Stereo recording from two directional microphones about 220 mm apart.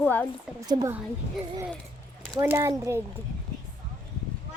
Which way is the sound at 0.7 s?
20° right (ahead or behind).